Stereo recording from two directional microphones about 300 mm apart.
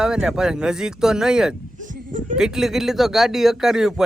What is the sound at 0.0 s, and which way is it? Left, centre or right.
Speech, centre.